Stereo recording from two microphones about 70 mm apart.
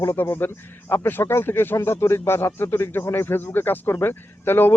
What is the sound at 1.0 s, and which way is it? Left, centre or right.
Speech, left.